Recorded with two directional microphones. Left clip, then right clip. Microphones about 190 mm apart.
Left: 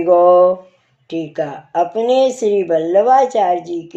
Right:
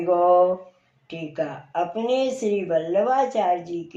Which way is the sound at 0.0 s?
40° left (ahead or behind).